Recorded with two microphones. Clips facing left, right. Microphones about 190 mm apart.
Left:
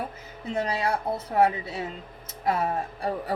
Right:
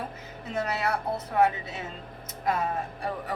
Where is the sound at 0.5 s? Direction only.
30° left (ahead or behind).